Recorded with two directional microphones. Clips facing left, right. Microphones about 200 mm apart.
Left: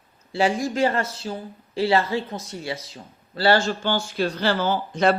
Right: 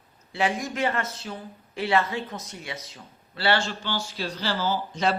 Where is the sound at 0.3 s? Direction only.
35° left (ahead or behind).